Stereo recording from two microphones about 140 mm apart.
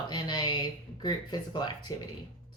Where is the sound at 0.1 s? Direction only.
30° left (ahead or behind).